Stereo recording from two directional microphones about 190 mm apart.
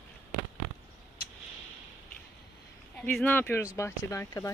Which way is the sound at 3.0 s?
10° left (ahead or behind).